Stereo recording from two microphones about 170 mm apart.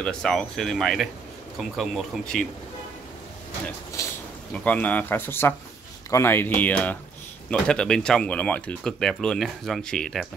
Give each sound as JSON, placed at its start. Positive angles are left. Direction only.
{"t": 0.0, "sound": "speech", "side_deg": 5}
{"t": 4.0, "sound": "a sound", "side_deg": 20}
{"t": 4.6, "sound": "speech", "side_deg": 10}